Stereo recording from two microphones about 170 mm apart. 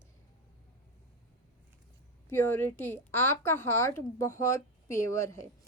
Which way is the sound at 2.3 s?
10° left (ahead or behind).